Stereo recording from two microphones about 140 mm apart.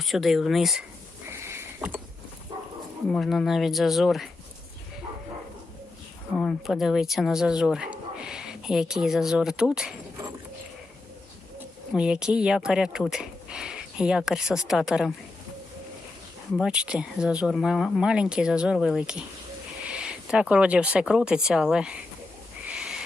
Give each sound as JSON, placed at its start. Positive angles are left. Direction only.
{"t": 0.0, "sound": "speech", "side_deg": 0}
{"t": 1.3, "sound": "a sound", "side_deg": -20}
{"t": 3.1, "sound": "speech", "side_deg": 0}
{"t": 6.3, "sound": "speech", "side_deg": 5}
{"t": 11.9, "sound": "speech", "side_deg": -5}
{"t": 16.6, "sound": "speech", "side_deg": -5}
{"t": 22.6, "sound": "owl", "side_deg": -5}